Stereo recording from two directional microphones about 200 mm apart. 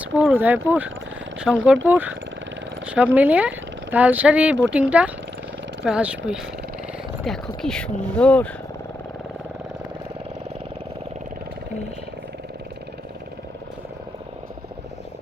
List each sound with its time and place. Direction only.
0.0 s speech: 5° right (ahead or behind)